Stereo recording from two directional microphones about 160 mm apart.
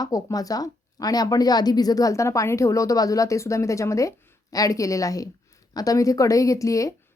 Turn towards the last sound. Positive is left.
turn(degrees=20)  # may be behind; listen again after turning